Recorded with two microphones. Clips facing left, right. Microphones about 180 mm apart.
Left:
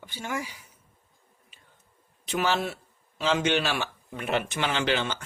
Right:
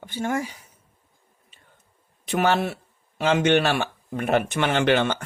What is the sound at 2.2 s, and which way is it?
Speech, 60° right (ahead or behind).